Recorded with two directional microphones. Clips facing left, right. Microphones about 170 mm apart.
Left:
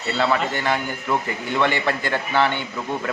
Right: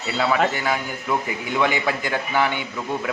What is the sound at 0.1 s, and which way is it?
A man's voice, 5° right (ahead or behind).